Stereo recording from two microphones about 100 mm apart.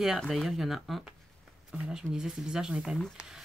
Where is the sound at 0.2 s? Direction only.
Centre (ahead or behind).